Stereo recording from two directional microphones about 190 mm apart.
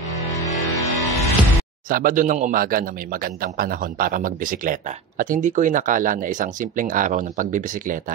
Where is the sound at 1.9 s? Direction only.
45° right (ahead or behind).